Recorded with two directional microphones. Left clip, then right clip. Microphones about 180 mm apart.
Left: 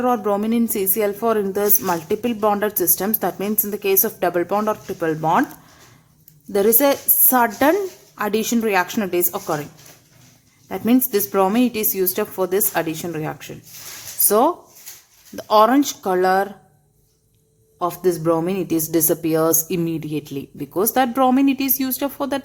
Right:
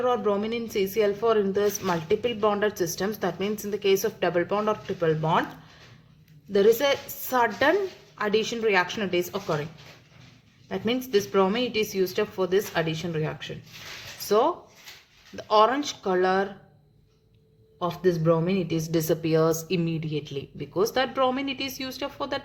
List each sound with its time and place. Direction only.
0.0 s a woman's voice: 50° left (ahead or behind)
6.5 s a woman's voice: 50° left (ahead or behind)
10.7 s a woman's voice: 50° left (ahead or behind)
17.7 s a woman's voice: 60° left (ahead or behind)